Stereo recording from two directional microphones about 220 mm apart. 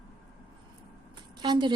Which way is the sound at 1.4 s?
20° right (ahead or behind).